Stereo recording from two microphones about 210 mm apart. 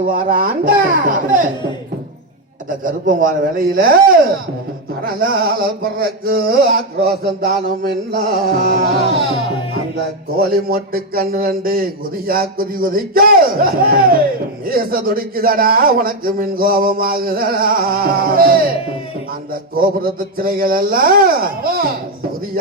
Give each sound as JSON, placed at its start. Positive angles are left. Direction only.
{"t": 0.1, "sound": "a man's voice", "side_deg": -40}
{"t": 2.6, "sound": "a man's voice", "side_deg": -40}
{"t": 5.4, "sound": "speech", "side_deg": -45}
{"t": 10.3, "sound": "speech", "side_deg": -45}
{"t": 19.7, "sound": "speech", "side_deg": -45}